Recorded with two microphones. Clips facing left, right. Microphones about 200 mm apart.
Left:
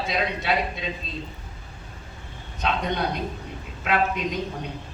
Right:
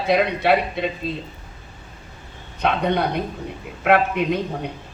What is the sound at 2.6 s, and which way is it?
A man's voice, 60° right (ahead or behind).